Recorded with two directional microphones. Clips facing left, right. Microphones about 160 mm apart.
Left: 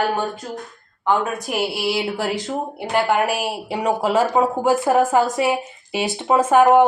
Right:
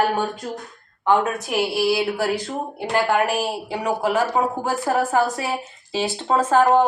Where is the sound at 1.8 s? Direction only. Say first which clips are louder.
Right 2 dB; 20° left (ahead or behind).